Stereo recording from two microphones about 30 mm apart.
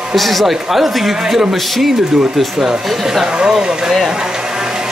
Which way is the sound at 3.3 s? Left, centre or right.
Right.